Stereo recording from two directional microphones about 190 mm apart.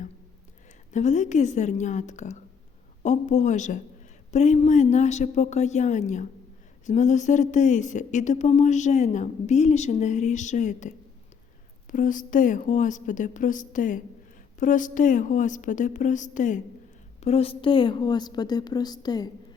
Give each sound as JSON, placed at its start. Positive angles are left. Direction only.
{"t": 0.9, "sound": "a woman's voice", "side_deg": 40}